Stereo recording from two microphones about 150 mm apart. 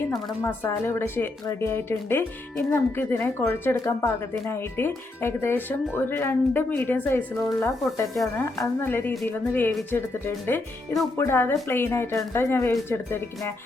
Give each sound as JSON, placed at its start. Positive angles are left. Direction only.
{"t": 0.4, "sound": "speech", "side_deg": 15}
{"t": 8.4, "sound": "speech", "side_deg": 15}